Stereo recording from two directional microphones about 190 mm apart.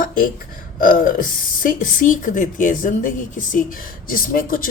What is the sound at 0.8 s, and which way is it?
Speech, 45° left (ahead or behind).